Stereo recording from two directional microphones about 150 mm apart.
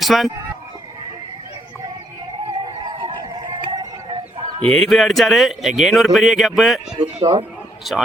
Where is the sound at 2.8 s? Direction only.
30° right (ahead or behind).